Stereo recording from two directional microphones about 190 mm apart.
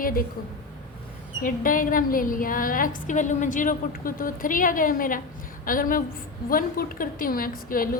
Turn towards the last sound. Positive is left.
turn(degrees=50)  # may be behind; listen again after turning